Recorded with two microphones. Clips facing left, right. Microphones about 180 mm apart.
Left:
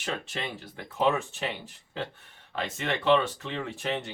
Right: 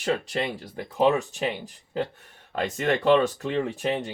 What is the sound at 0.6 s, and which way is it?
Speech, 35° right (ahead or behind).